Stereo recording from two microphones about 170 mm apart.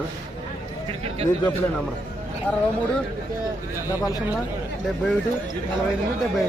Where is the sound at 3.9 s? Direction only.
20° left (ahead or behind).